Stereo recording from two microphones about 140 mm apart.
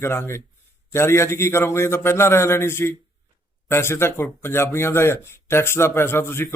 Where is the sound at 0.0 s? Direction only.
15° left (ahead or behind).